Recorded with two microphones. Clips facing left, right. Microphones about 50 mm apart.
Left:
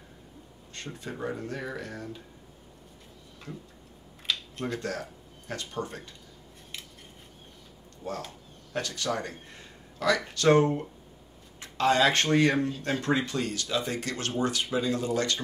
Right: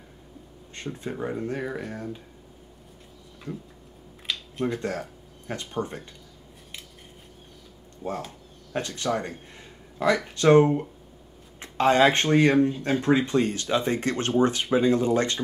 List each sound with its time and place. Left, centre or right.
0.8 s speech: right
4.3 s a sound: centre
5.5 s speech: right
8.7 s speech: right